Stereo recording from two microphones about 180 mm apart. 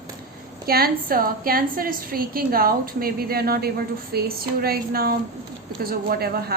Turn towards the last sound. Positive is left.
turn(degrees=-60)  # may be behind; listen again after turning